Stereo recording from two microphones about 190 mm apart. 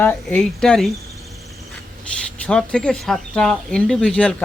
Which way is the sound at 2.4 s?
5° left (ahead or behind).